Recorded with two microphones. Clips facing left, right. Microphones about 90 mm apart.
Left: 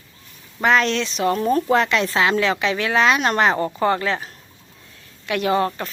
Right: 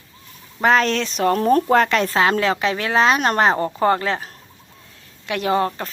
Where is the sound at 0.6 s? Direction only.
35° right (ahead or behind).